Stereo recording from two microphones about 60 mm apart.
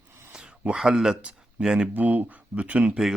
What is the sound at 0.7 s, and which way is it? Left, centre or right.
Speech, centre.